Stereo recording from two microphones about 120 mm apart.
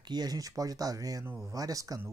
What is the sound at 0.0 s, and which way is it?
Speech, 35° right (ahead or behind).